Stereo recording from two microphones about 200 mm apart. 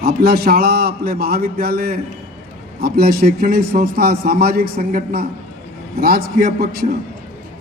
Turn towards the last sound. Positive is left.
turn(degrees=-50)  # may be behind; listen again after turning